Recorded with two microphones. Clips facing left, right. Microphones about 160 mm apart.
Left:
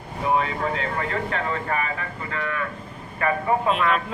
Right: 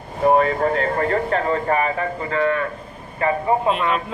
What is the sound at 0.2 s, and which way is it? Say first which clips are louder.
A man's voice: right 7 dB; 50° right (ahead or behind).